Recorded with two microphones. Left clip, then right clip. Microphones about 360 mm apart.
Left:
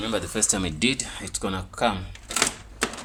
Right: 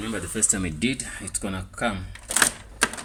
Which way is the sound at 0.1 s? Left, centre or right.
Left.